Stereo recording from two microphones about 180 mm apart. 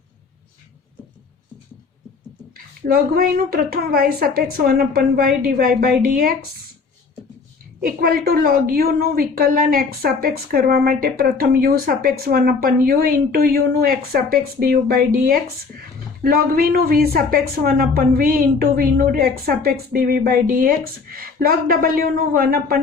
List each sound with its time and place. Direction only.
2.8 s a woman's voice: 55° right (ahead or behind)
7.8 s a woman's voice: 55° right (ahead or behind)